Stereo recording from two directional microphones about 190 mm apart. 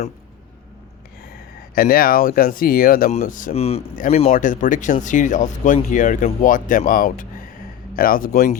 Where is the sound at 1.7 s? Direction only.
50° left (ahead or behind).